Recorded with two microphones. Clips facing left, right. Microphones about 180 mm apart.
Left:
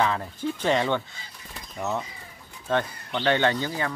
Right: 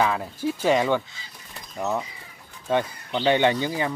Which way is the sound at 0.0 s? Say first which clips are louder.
Right 2 dB; 5° right (ahead or behind).